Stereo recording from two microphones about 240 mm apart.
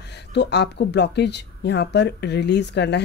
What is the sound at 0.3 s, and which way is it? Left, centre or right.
Speech, left.